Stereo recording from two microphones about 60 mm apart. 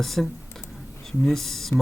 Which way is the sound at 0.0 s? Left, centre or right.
Centre.